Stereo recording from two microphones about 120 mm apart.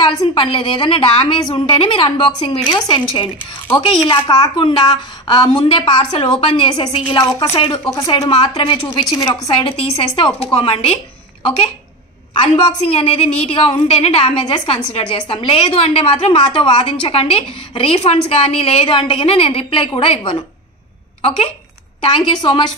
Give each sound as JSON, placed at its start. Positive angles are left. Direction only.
{"t": 0.2, "sound": "a woman's voice", "side_deg": 45}
{"t": 4.1, "sound": "a woman's voice", "side_deg": 35}
{"t": 7.4, "sound": "a woman's voice", "side_deg": 55}
{"t": 7.7, "sound": "a woman's voice", "side_deg": 30}
{"t": 9.6, "sound": "a woman's voice", "side_deg": 50}
{"t": 12.4, "sound": "a woman's voice", "side_deg": 45}
{"t": 14.4, "sound": "a woman's voice", "side_deg": 40}
{"t": 22.0, "sound": "a woman's voice", "side_deg": 45}